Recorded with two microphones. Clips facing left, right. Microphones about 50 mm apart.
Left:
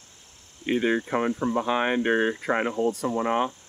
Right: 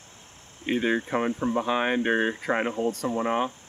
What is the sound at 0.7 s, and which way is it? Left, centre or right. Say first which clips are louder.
Speech: left 1 dB; centre.